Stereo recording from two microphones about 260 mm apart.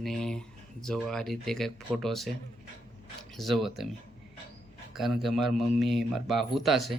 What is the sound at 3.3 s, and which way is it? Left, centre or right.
Speech, centre.